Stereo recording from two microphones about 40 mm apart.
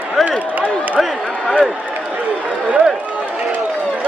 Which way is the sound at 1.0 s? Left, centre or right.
Centre.